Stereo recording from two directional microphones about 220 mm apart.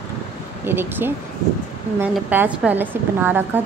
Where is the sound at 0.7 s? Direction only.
10° right (ahead or behind).